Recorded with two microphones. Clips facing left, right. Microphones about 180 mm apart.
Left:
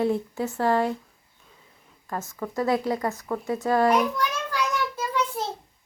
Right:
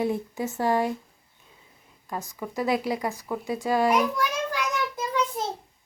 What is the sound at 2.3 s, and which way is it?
A child's voice, 15° right (ahead or behind).